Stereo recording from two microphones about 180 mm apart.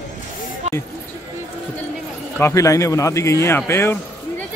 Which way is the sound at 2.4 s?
15° left (ahead or behind).